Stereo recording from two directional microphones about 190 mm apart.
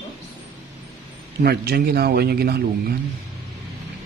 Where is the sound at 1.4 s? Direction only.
55° right (ahead or behind).